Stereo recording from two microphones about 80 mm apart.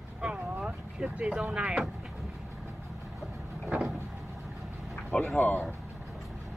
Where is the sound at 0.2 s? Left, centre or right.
Centre.